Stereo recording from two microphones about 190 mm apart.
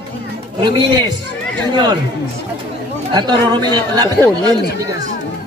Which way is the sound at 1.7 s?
20° right (ahead or behind).